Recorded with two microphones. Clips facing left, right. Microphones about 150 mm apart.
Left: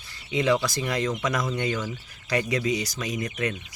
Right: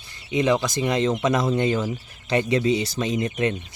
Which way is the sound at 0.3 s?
20° right (ahead or behind).